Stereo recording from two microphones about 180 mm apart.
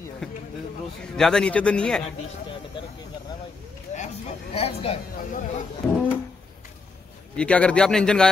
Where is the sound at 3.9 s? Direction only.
35° left (ahead or behind).